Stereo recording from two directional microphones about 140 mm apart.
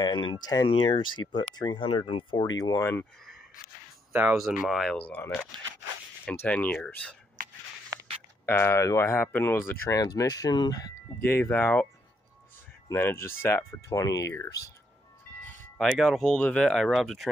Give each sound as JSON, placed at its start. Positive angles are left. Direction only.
{"t": 0.0, "sound": "speech", "side_deg": 30}
{"t": 2.8, "sound": "speech", "side_deg": 15}
{"t": 4.1, "sound": "speech", "side_deg": -15}
{"t": 4.4, "sound": "speech", "side_deg": -5}
{"t": 4.9, "sound": "speech", "side_deg": 10}
{"t": 7.4, "sound": "a sound", "side_deg": -75}
{"t": 8.5, "sound": "speech", "side_deg": 15}
{"t": 11.2, "sound": "speech", "side_deg": 15}
{"t": 15.8, "sound": "speech", "side_deg": 5}